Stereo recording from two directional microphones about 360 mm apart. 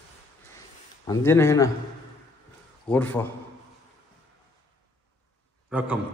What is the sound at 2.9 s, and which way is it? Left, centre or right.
Speech, centre.